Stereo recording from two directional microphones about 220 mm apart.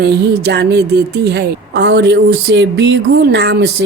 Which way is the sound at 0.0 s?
50° right (ahead or behind).